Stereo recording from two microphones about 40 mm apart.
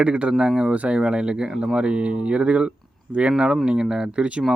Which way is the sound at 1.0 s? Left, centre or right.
Right.